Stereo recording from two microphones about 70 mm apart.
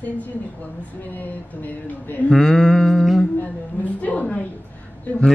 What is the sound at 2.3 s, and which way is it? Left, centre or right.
Music, centre.